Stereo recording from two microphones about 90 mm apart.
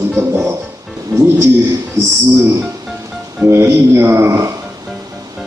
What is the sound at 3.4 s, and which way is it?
A man's voice, 30° right (ahead or behind).